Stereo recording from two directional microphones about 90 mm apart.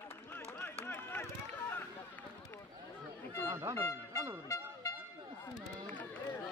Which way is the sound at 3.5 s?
40° right (ahead or behind).